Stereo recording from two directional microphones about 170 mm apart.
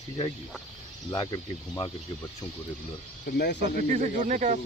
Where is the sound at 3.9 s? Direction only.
45° right (ahead or behind).